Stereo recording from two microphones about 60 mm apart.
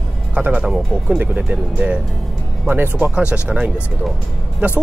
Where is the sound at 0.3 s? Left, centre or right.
Right.